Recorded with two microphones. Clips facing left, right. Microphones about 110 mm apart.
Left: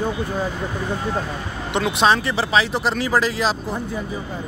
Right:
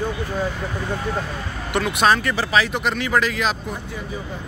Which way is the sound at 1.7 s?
25° left (ahead or behind).